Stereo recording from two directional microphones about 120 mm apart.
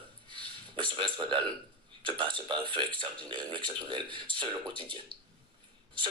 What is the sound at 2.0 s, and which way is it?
A man's voice, 45° right (ahead or behind).